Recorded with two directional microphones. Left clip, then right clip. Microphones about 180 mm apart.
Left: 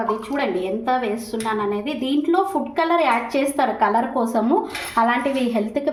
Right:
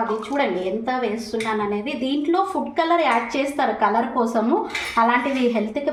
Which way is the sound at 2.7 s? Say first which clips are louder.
Even; 35° left (ahead or behind).